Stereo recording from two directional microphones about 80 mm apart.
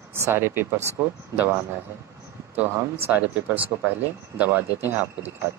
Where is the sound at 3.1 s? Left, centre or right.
Right.